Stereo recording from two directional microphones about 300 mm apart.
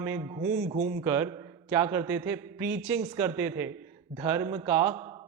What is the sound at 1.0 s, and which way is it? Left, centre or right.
A man's voice, centre.